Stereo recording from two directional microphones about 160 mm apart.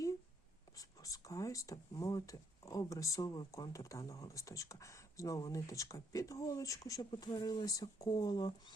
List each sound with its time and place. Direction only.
0.8 s speech: 20° left (ahead or behind)